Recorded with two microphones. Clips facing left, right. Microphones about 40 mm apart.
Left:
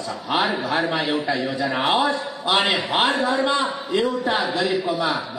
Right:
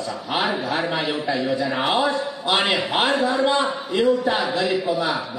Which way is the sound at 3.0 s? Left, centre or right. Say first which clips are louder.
Even; left.